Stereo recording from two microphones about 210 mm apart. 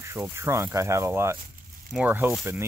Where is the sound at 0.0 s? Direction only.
15° right (ahead or behind).